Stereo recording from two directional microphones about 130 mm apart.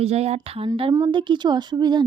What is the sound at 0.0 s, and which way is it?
Speech, 55° right (ahead or behind).